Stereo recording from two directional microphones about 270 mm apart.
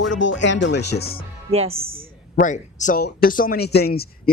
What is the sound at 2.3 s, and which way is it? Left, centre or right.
Speech, left.